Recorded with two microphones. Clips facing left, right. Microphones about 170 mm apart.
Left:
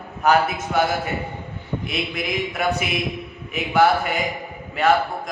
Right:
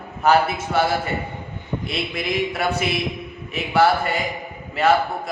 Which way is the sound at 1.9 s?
Centre (ahead or behind).